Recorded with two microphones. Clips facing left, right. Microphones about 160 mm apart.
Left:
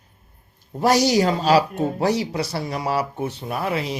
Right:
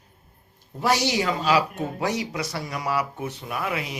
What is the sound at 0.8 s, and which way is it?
Speech, 40° left (ahead or behind).